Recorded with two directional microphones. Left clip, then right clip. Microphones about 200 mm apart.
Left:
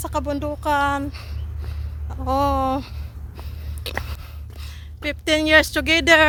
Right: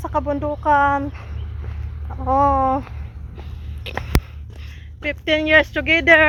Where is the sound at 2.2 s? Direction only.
25° left (ahead or behind).